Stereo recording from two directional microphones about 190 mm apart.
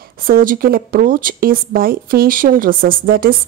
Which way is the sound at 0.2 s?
50° right (ahead or behind).